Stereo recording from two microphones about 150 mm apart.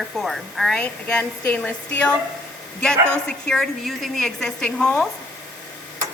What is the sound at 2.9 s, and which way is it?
Speech, 15° right (ahead or behind).